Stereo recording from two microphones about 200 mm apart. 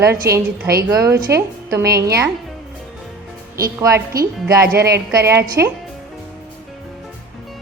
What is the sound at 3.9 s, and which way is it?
Speech, 50° right (ahead or behind).